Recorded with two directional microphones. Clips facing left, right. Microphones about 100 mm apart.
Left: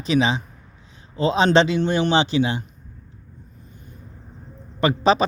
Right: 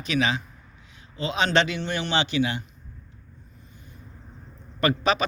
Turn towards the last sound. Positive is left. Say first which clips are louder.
# left 5 dB
turn(degrees=30)  # may be behind; listen again after turning